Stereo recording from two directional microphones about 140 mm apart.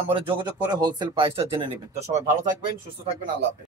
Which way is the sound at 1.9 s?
55° right (ahead or behind).